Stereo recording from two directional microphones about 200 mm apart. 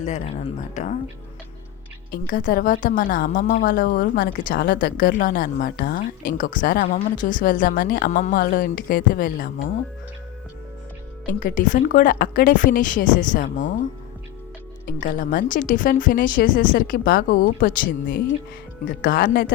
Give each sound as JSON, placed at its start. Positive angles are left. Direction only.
{"t": 0.0, "sound": "a woman's voice", "side_deg": 35}
{"t": 11.3, "sound": "speech", "side_deg": 40}
{"t": 14.8, "sound": "a woman's voice", "side_deg": 40}